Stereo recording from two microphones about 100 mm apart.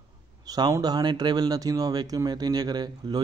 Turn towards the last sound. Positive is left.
turn(degrees=-45)  # may be behind; listen again after turning